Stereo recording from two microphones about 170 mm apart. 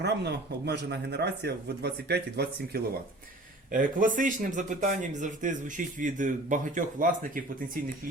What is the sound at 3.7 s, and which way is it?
A man's voice, 50° right (ahead or behind).